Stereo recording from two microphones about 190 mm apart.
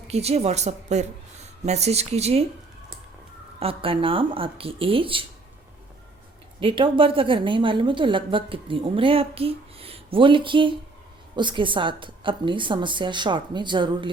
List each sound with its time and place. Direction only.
0.1 s speech: 35° right (ahead or behind)
3.6 s a woman's voice: 30° right (ahead or behind)
6.6 s a woman's voice: 25° right (ahead or behind)